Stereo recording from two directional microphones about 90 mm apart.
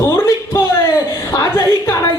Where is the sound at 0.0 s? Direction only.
30° left (ahead or behind).